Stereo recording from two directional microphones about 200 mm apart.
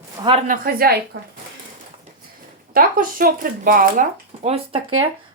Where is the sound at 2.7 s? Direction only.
45° right (ahead or behind).